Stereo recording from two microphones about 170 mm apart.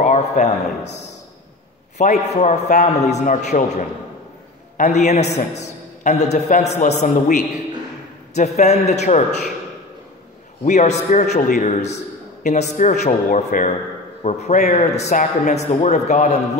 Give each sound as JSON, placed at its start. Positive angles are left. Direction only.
{"t": 0.0, "sound": "a sound", "side_deg": 45}
{"t": 2.0, "sound": "a man's voice", "side_deg": 45}
{"t": 10.6, "sound": "a man's voice", "side_deg": 40}